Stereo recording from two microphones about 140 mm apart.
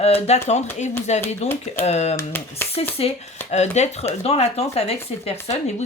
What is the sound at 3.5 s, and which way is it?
Speech, 55° left (ahead or behind).